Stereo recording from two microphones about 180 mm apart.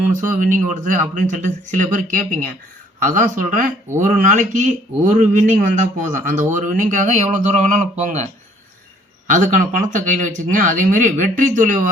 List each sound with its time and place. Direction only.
0.2 s speech: 45° right (ahead or behind)
9.3 s speech: 45° right (ahead or behind)